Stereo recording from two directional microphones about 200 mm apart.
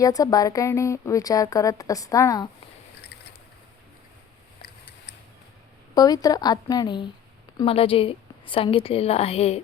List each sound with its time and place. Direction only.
0.0 s speech: 15° left (ahead or behind)
5.9 s a woman's voice: 20° left (ahead or behind)